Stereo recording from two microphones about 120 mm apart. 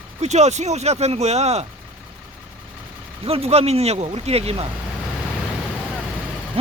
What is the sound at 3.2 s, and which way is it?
Speech, 55° right (ahead or behind).